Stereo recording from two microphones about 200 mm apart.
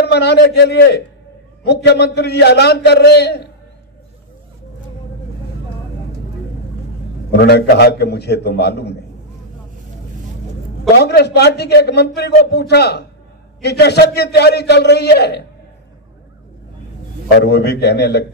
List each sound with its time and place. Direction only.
0.0 s a man's voice: 55° left (ahead or behind)
7.2 s a man's voice: 55° left (ahead or behind)
11.0 s a man's voice: 55° left (ahead or behind)
17.3 s a man's voice: 55° left (ahead or behind)